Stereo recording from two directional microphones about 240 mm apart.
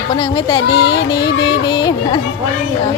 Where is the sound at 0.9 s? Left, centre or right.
Centre.